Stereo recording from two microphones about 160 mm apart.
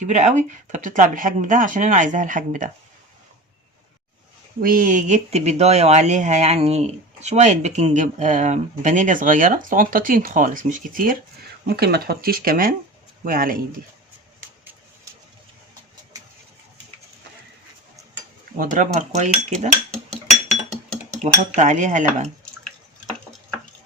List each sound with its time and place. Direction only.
0.1 s speech: 45° right (ahead or behind)
4.6 s speech: 60° right (ahead or behind)
11.6 s speech: 80° right; by 13.6 s 60° right (ahead or behind)
18.5 s speech: 55° right (ahead or behind)
21.5 s speech: 50° right (ahead or behind)